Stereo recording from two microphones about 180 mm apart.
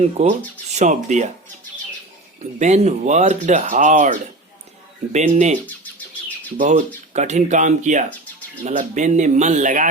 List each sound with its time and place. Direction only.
0.0 s speech: 35° right (ahead or behind)
2.4 s a man's voice: 40° right (ahead or behind)
6.6 s a man's voice: 45° right (ahead or behind)